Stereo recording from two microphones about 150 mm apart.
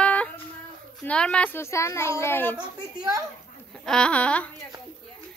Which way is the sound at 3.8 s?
5° left (ahead or behind).